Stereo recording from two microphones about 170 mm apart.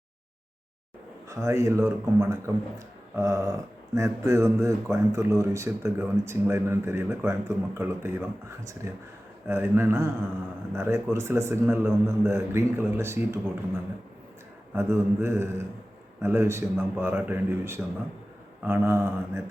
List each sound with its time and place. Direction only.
1.3 s speech: 15° right (ahead or behind)
14.8 s speech: 15° right (ahead or behind)